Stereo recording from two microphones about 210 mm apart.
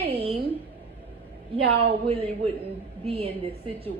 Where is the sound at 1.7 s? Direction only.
25° right (ahead or behind).